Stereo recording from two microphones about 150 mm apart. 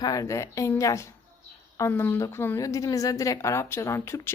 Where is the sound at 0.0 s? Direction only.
25° left (ahead or behind).